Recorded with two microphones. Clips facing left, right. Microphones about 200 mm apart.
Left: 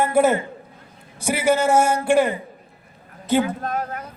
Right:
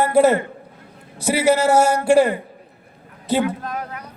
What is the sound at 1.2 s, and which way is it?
Speech, 35° right (ahead or behind).